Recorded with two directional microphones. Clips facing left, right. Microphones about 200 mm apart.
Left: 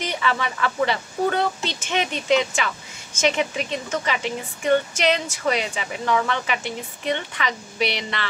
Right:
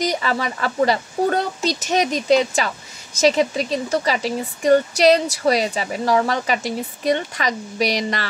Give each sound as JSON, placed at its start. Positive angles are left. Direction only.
{"t": 0.0, "sound": "speech", "side_deg": -40}